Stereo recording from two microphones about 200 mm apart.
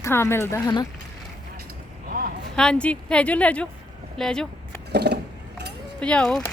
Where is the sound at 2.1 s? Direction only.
45° right (ahead or behind).